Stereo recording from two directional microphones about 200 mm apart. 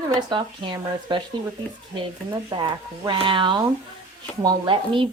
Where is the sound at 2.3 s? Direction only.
25° right (ahead or behind).